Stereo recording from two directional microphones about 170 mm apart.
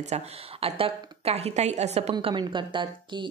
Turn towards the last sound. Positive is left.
turn(degrees=-30)  # may be behind; listen again after turning